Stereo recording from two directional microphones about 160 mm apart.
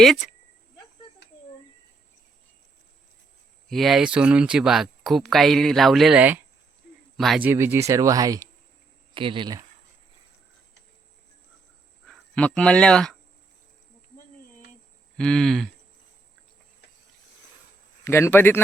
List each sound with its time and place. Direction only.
0.0 s speech: centre (ahead or behind)
3.7 s speech: centre (ahead or behind)
7.2 s speech: centre (ahead or behind)
7.4 s speech: 15° right (ahead or behind)
9.1 s speech: 30° right (ahead or behind)
12.0 s speech: 5° left (ahead or behind)
15.2 s speech: 5° left (ahead or behind)
18.0 s a man's voice: 15° left (ahead or behind)